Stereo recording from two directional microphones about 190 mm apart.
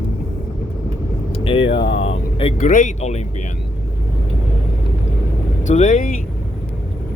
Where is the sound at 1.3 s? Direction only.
30° left (ahead or behind).